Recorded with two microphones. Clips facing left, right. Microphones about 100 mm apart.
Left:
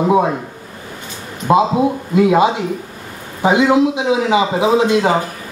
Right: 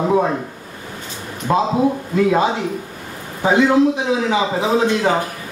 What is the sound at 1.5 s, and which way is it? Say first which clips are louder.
A man's voice: left 3 dB; 20° left (ahead or behind).